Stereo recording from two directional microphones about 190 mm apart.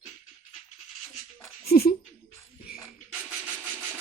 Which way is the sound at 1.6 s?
55° left (ahead or behind).